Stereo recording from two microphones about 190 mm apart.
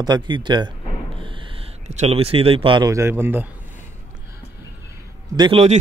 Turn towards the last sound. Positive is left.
turn(degrees=-25)  # may be behind; listen again after turning